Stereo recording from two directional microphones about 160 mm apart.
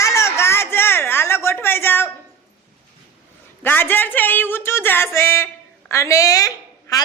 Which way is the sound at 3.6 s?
15° left (ahead or behind).